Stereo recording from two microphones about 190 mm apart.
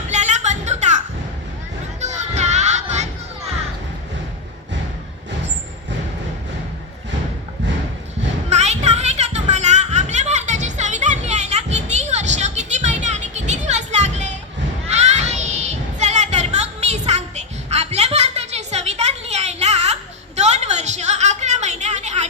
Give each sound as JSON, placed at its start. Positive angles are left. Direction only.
{"t": 0.1, "sound": "a sound", "side_deg": -40}
{"t": 2.0, "sound": "children playing", "side_deg": -35}
{"t": 8.4, "sound": "children playing", "side_deg": -35}